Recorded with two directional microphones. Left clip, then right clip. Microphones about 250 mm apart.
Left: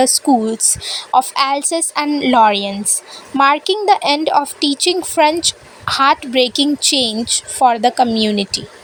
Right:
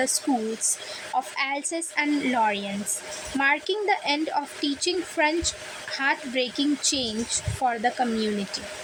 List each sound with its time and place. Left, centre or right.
0.6 s speech: left